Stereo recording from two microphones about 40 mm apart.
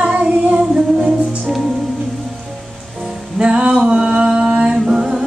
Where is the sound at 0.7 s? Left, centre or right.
Centre.